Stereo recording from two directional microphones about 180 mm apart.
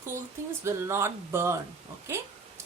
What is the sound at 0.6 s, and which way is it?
Speech, 15° right (ahead or behind).